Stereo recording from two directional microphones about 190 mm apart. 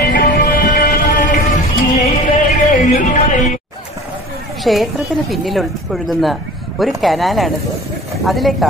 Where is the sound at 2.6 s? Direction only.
40° left (ahead or behind).